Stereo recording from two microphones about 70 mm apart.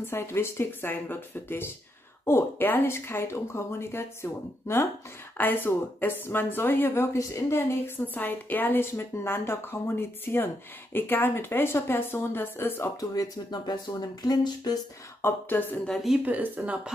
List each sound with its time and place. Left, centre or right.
0.0 s a woman's voice: left
13.1 s speech: left
15.2 s a woman's voice: left
16.3 s speech: right